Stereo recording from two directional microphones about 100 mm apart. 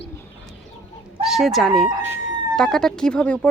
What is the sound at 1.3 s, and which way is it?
Speech, centre (ahead or behind).